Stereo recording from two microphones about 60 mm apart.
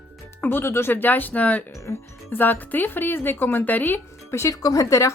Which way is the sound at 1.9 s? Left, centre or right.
Left.